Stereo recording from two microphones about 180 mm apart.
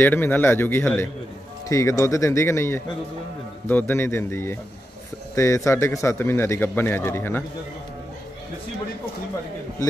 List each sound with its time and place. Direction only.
0.0 s a man's voice: 10° left (ahead or behind)